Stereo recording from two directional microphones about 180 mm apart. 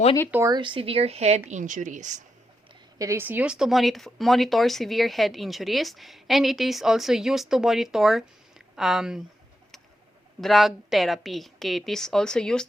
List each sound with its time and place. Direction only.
0.3 s speech: 10° right (ahead or behind)
0.5 s speech: 25° right (ahead or behind); by 2.2 s 40° right (ahead or behind)
3.0 s speech: 15° right (ahead or behind)
10.4 s speech: centre (ahead or behind)